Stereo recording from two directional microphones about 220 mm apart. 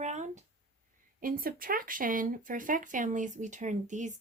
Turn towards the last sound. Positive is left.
turn(degrees=-35)  # may be behind; listen again after turning